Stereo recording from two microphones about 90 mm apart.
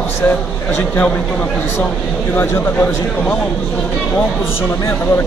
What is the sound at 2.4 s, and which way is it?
Speech, 20° left (ahead or behind).